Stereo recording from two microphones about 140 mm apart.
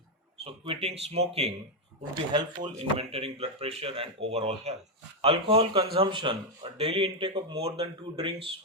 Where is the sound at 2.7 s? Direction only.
45° right (ahead or behind).